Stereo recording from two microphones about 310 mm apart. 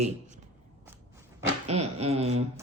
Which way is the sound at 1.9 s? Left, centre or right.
Centre.